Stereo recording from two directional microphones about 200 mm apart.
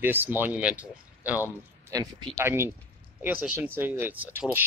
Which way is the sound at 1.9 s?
20° right (ahead or behind).